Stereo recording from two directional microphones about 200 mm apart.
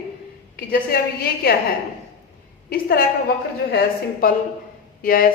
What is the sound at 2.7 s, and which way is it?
A woman's voice, 50° left (ahead or behind).